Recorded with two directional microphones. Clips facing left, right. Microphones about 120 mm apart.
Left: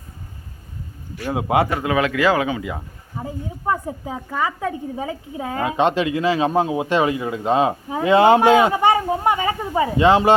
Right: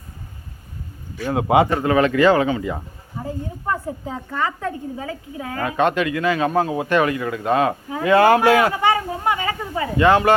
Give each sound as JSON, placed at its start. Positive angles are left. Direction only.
{"t": 1.2, "sound": "a woman's voice", "side_deg": 5}